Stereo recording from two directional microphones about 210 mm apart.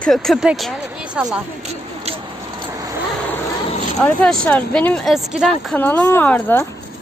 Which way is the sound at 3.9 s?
5° left (ahead or behind).